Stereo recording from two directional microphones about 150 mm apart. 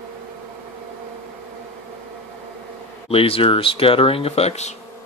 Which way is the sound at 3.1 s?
40° left (ahead or behind).